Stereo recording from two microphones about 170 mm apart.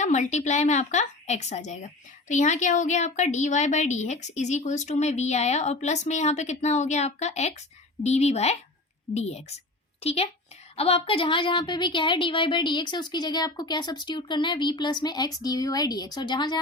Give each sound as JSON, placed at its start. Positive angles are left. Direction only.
{"t": 0.0, "sound": "a woman's voice", "side_deg": 45}